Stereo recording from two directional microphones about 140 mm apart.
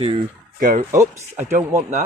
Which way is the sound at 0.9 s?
20° right (ahead or behind).